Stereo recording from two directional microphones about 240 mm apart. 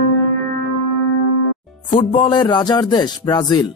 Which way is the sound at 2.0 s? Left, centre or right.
Centre.